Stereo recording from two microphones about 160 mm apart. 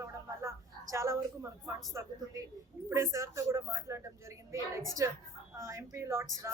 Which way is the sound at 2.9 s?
20° right (ahead or behind).